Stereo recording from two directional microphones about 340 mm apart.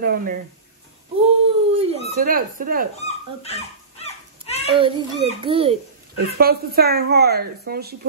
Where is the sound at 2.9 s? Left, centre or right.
Centre.